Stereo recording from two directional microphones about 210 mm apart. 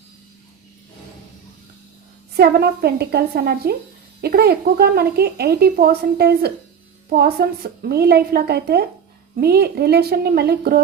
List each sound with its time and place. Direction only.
2.3 s speech: 50° right (ahead or behind)